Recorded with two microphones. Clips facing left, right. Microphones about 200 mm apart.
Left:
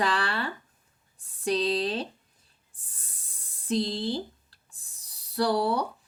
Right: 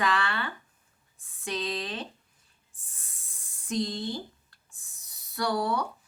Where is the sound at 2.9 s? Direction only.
35° left (ahead or behind).